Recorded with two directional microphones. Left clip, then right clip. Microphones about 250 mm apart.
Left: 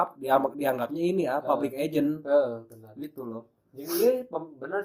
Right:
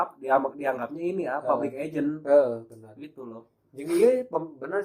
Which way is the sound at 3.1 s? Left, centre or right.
Left.